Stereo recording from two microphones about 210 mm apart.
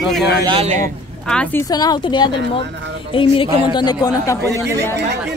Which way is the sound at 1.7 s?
20° left (ahead or behind).